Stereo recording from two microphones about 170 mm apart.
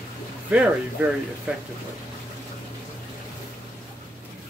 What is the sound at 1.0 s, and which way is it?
Speech, 10° right (ahead or behind).